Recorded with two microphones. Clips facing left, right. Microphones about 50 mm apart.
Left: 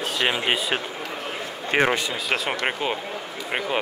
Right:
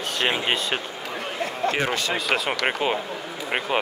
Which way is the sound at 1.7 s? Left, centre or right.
Left.